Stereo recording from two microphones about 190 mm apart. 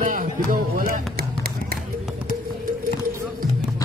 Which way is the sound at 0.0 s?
45° right (ahead or behind).